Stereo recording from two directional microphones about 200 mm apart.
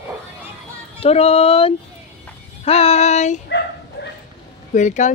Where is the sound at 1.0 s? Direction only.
30° left (ahead or behind).